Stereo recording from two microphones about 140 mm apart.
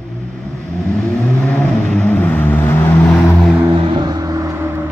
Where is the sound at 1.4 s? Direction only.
10° left (ahead or behind).